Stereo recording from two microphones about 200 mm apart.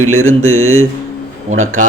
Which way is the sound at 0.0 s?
90° right.